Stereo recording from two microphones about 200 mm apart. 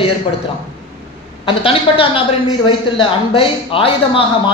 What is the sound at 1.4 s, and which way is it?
A man's voice, 25° left (ahead or behind).